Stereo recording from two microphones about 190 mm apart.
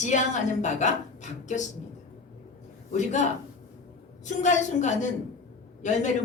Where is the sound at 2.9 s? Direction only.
40° left (ahead or behind).